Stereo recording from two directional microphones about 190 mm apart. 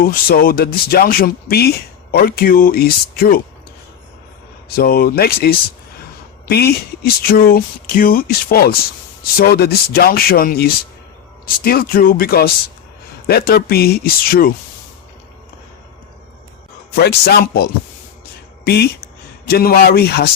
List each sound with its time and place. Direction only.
0.0 s speech: 50° left (ahead or behind)
4.7 s speech: 50° left (ahead or behind)
16.9 s a man's voice: 55° left (ahead or behind)